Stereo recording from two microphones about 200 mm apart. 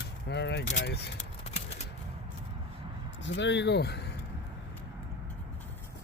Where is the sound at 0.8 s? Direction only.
55° left (ahead or behind).